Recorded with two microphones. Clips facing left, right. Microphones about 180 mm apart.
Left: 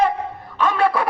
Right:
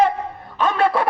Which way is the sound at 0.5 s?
25° right (ahead or behind).